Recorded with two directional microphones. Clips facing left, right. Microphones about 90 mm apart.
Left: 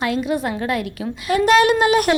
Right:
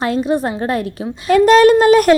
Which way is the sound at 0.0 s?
35° right (ahead or behind).